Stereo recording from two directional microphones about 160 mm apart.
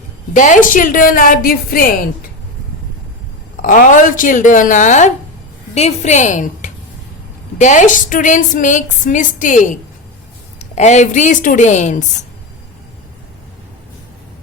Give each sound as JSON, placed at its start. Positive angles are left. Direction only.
{"t": 0.3, "sound": "a woman's voice", "side_deg": 50}
{"t": 3.6, "sound": "a woman's voice", "side_deg": 55}